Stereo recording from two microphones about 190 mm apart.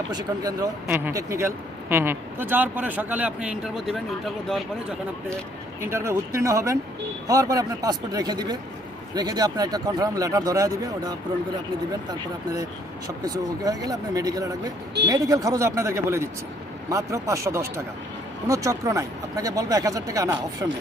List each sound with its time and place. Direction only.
0.1 s speech: 20° right (ahead or behind); by 5.4 s centre (ahead or behind)
5.8 s speech: 15° right (ahead or behind)
13.1 s speech: 20° right (ahead or behind)